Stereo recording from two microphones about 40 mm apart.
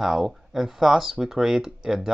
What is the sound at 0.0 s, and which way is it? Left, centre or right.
Speech, centre.